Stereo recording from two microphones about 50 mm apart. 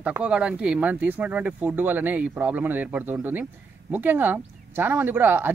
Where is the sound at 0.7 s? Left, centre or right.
Right.